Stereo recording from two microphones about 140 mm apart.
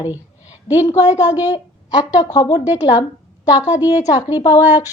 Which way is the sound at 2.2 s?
30° left (ahead or behind).